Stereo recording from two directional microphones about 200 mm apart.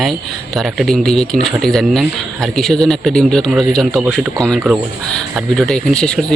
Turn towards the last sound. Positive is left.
turn(degrees=5)  # may be behind; listen again after turning